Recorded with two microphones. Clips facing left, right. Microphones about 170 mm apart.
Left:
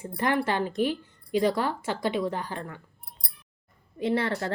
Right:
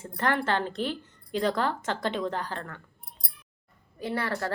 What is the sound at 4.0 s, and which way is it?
Speech, 25° left (ahead or behind).